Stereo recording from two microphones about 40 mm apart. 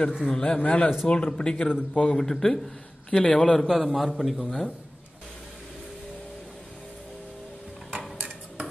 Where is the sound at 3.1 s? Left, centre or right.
Left.